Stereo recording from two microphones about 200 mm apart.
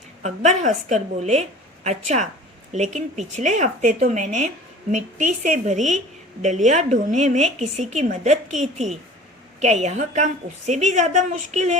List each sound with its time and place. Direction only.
0.2 s speech: 35° right (ahead or behind)